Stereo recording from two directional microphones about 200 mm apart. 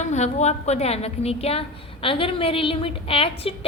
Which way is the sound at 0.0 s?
35° left (ahead or behind).